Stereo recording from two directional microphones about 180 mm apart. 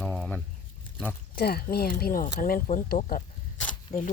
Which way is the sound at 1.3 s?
60° left (ahead or behind).